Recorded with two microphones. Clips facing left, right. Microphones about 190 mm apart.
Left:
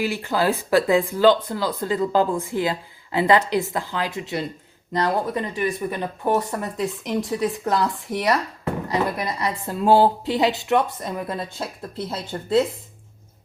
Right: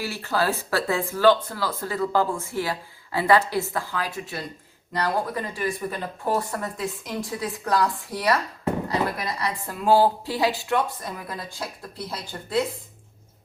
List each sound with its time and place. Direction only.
0.0 s speech: 15° left (ahead or behind)